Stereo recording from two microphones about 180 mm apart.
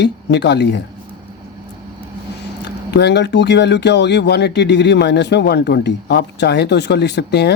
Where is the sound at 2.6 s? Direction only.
70° left (ahead or behind).